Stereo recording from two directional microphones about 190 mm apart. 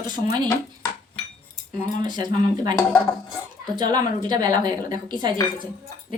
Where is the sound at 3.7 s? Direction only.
25° right (ahead or behind).